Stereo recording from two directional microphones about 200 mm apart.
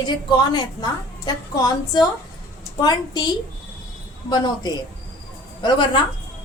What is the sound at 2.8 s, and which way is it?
Speech, 20° left (ahead or behind).